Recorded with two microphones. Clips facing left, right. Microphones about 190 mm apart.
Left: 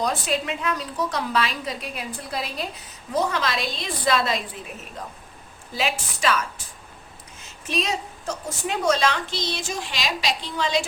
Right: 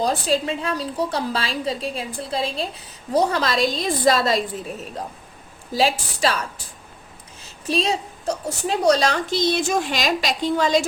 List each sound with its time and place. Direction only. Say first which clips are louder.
0.0 s a woman's voice: right 4 dB; 30° right (ahead or behind)
5.7 s a woman's voice: right 6 dB; 35° right (ahead or behind)
7.7 s a woman's voice: right 4 dB; 30° right (ahead or behind)